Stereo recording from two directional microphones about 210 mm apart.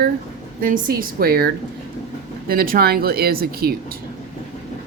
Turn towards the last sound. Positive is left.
turn(degrees=-45)  # may be behind; listen again after turning